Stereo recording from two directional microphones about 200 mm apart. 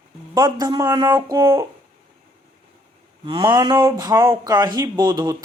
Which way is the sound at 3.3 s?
20° right (ahead or behind).